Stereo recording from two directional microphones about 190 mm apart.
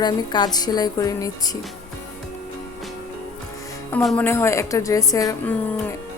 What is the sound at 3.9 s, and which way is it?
A woman's voice, 10° left (ahead or behind).